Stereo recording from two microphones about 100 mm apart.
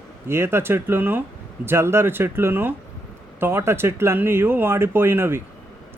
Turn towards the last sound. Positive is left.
turn(degrees=-25)  # may be behind; listen again after turning